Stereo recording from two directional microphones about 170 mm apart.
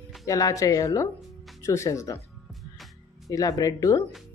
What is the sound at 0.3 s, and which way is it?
A woman's voice, 20° left (ahead or behind).